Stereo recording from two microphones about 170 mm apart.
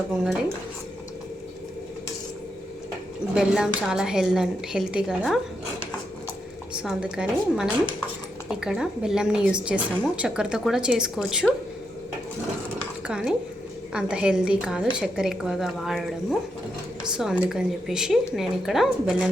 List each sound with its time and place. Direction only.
3.3 s a woman's voice: 5° right (ahead or behind)
6.7 s a woman's voice: 5° right (ahead or behind)
13.1 s a woman's voice: 5° right (ahead or behind)